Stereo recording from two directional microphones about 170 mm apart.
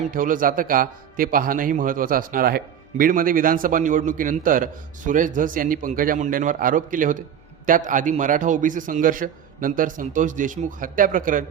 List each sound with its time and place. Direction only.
0.1 s a man's voice: 55° right (ahead or behind)